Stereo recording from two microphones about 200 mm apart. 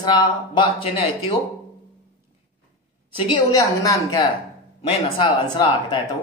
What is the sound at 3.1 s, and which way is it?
Speech, 20° left (ahead or behind).